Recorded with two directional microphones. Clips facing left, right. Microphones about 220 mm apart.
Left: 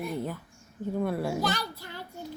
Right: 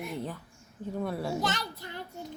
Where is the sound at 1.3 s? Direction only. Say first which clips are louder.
Left 2 dB; 20° right (ahead or behind).